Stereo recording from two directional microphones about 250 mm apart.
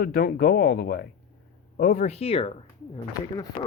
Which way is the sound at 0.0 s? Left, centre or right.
Left.